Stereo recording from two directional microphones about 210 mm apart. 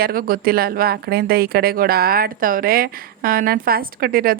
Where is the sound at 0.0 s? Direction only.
45° right (ahead or behind).